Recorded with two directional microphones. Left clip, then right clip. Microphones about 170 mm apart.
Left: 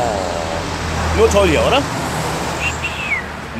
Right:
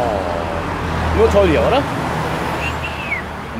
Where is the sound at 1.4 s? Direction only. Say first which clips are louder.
Even; 15° left (ahead or behind).